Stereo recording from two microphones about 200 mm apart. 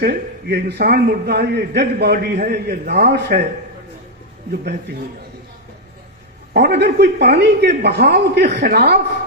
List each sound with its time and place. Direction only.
0.0 s a man's voice: 55° right (ahead or behind)
6.5 s a man's voice: 55° right (ahead or behind)